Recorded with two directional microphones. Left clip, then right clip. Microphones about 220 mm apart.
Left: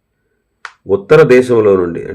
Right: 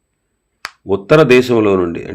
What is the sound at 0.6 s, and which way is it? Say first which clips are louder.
Finger snapping: left 3 dB; 30° right (ahead or behind).